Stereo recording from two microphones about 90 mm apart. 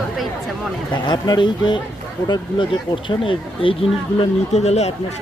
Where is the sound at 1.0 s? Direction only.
50° left (ahead or behind).